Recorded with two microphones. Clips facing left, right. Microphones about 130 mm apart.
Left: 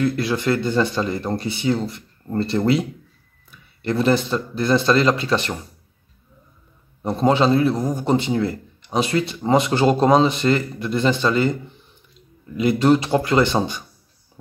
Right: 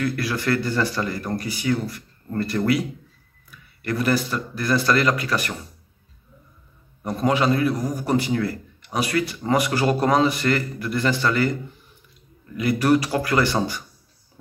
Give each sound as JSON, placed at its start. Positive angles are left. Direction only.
{"t": 0.0, "sound": "a man's voice", "side_deg": 25}
{"t": 7.0, "sound": "a man's voice", "side_deg": 25}
{"t": 12.5, "sound": "a man's voice", "side_deg": 25}